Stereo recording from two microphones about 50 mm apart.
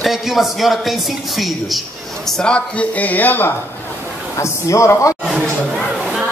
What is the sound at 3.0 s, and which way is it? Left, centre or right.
Speech, left.